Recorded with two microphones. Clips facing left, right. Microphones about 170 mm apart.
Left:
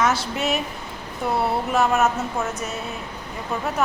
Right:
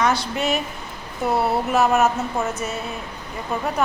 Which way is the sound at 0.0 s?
5° left (ahead or behind).